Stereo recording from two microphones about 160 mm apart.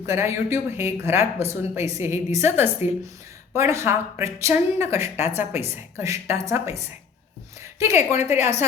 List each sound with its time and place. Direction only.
0.0 s speech: 15° right (ahead or behind)
7.6 s a sound: 15° right (ahead or behind)
8.1 s a woman's voice: 45° left (ahead or behind)